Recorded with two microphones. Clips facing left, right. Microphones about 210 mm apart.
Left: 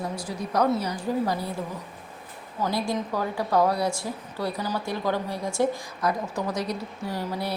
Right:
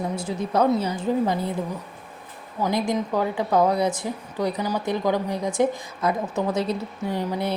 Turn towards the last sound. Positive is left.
turn(degrees=-20)  # may be behind; listen again after turning